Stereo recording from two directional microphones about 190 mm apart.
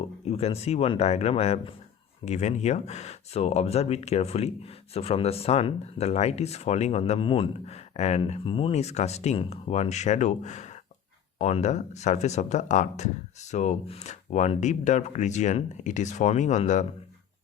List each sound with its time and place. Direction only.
0.3 s speech: 30° left (ahead or behind)